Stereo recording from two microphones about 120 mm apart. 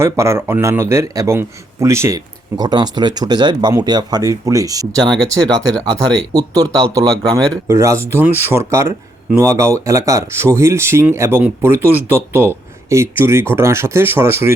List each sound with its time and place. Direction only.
0.0 s speech: 20° right (ahead or behind)
5.0 s speech: 5° left (ahead or behind)
6.3 s speech: 30° right (ahead or behind)